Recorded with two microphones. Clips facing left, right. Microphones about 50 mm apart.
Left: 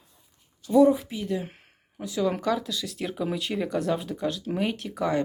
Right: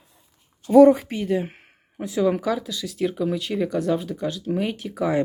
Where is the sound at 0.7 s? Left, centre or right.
Right.